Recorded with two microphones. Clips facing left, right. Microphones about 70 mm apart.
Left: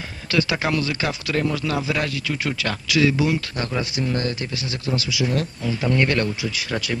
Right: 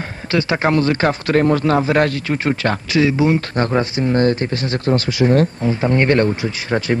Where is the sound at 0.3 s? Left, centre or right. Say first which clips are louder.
Right 5 dB; right.